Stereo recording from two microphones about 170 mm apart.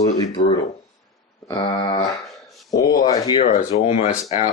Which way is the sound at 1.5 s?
30° left (ahead or behind).